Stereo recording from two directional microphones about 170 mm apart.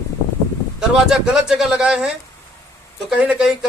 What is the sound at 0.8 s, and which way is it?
Speech, 5° right (ahead or behind).